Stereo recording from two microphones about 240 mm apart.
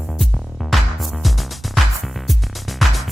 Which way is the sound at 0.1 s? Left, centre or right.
Centre.